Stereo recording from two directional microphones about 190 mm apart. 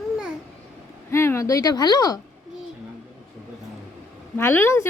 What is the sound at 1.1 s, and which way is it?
Speech, 15° left (ahead or behind).